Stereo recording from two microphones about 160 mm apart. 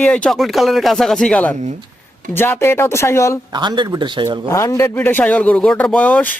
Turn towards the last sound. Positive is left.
turn(degrees=10)  # may be behind; listen again after turning